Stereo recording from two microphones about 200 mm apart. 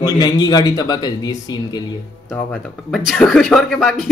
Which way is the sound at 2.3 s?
5° left (ahead or behind).